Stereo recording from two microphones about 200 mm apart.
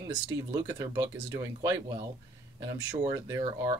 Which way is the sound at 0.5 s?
15° right (ahead or behind).